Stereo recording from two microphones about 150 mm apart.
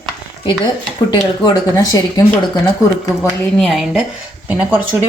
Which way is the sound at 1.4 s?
25° left (ahead or behind).